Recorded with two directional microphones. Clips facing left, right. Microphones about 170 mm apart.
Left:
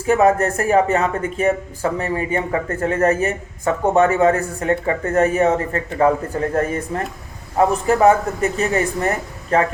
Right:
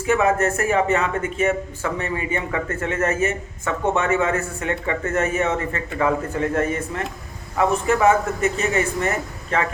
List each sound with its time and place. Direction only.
0.0 s speech: 35° left (ahead or behind)